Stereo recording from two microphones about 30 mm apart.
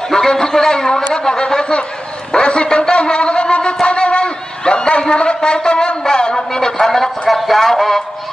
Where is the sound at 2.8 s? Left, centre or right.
Left.